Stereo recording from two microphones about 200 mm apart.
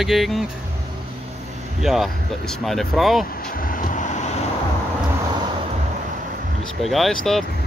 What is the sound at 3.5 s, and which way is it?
Vehicle, 45° left (ahead or behind).